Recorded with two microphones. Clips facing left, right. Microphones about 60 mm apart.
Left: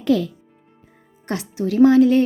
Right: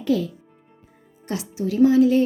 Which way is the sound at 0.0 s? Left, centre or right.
Left.